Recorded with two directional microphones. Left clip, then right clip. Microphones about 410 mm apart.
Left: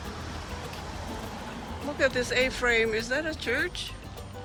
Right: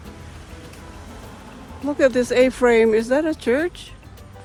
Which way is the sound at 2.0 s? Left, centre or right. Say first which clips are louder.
Right 9 dB; centre.